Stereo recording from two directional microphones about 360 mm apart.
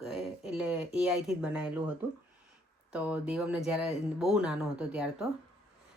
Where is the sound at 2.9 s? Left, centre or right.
Centre.